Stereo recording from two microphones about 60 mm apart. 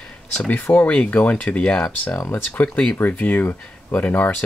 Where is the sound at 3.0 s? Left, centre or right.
Left.